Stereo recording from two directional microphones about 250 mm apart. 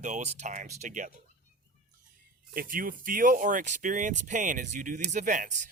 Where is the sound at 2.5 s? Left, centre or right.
Right.